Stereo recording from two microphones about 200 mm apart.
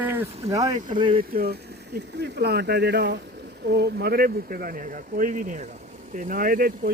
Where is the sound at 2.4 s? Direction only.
55° right (ahead or behind).